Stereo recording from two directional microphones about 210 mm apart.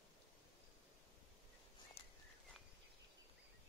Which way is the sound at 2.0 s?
25° left (ahead or behind).